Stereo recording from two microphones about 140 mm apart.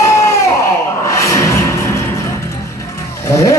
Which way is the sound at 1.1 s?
20° left (ahead or behind).